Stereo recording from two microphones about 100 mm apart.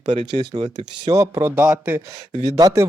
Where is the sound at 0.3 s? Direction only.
45° right (ahead or behind).